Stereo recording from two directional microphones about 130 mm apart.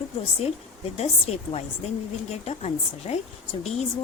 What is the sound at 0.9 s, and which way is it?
A woman's voice, 55° left (ahead or behind).